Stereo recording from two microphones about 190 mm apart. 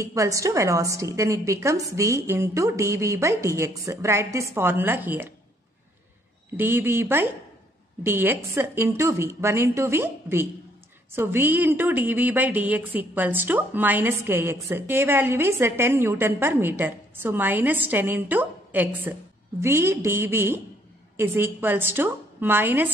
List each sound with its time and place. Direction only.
0.0 s a woman's voice: 15° right (ahead or behind)
6.5 s a woman's voice: 10° right (ahead or behind)